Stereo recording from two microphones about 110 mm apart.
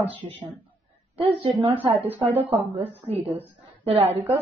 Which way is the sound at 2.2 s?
70° right (ahead or behind).